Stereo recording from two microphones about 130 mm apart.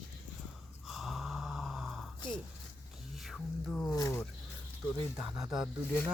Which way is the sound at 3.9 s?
25° left (ahead or behind).